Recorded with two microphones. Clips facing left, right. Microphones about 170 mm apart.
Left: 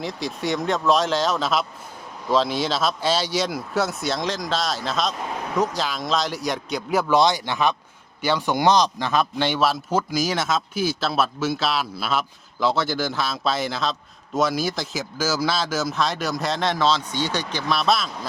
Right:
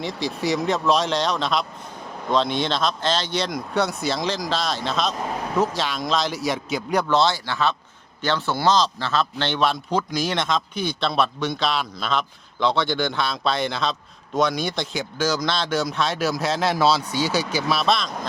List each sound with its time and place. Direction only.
0.0 s speech: centre (ahead or behind)
7.1 s speech: 15° left (ahead or behind)